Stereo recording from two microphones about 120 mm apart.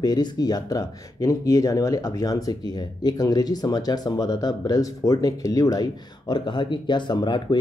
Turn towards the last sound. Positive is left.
turn(degrees=40)  # may be behind; listen again after turning